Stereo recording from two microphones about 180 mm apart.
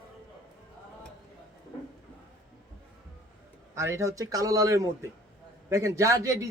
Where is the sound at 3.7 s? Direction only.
15° right (ahead or behind).